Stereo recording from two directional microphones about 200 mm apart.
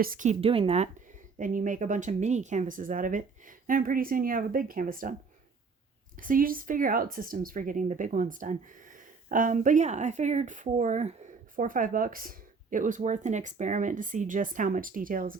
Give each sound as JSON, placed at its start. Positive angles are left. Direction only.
{"t": 0.0, "sound": "speech", "side_deg": -40}
{"t": 1.4, "sound": "speech", "side_deg": -40}
{"t": 6.1, "sound": "speech", "side_deg": -45}